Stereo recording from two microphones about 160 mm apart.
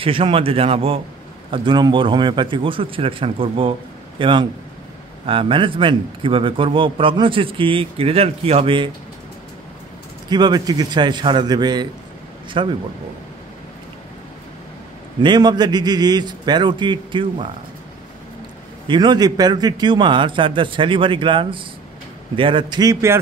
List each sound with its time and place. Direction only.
0.0 s a man's voice: 35° right (ahead or behind)
10.3 s a man's voice: 25° right (ahead or behind)
15.1 s a man's voice: 30° right (ahead or behind)
18.9 s a man's voice: 25° right (ahead or behind)